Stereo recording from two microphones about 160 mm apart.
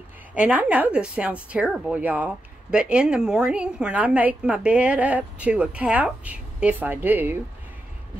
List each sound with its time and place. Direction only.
0.3 s speech: 10° right (ahead or behind)